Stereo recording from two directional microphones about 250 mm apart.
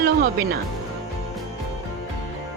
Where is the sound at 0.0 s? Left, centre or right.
Right.